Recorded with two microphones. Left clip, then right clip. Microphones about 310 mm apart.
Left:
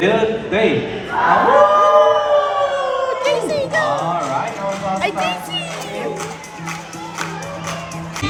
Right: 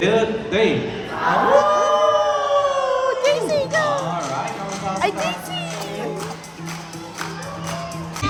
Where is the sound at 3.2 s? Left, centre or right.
Right.